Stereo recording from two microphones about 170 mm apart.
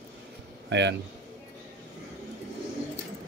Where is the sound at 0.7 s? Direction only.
90° right.